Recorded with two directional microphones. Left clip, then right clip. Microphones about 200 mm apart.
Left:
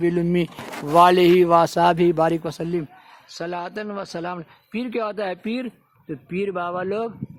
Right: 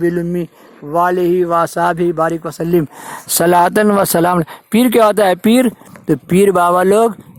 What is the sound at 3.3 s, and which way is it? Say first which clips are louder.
Speech: right 18 dB; 50° right (ahead or behind).